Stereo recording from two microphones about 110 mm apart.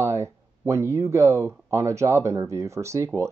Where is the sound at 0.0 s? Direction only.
25° right (ahead or behind).